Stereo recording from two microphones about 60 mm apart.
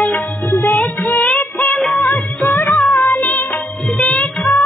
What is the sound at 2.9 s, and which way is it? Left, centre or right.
Music, left.